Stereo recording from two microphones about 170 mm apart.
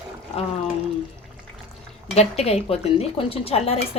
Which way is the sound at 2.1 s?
40° left (ahead or behind).